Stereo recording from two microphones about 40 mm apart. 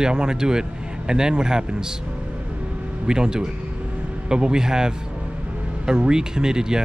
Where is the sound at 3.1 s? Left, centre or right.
Centre.